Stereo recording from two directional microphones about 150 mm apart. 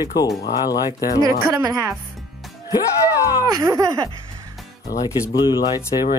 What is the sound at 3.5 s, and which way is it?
Speech, 25° right (ahead or behind).